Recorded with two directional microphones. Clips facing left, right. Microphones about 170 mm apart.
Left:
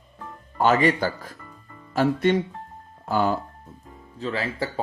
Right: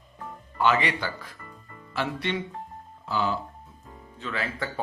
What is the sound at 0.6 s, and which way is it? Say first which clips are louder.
Speech: left 5 dB; 45° left (ahead or behind).